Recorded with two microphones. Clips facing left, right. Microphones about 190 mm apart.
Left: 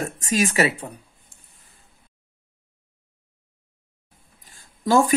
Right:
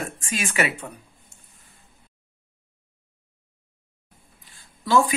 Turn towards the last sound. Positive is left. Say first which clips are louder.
# left 2 dB
turn(degrees=45)  # may be behind; listen again after turning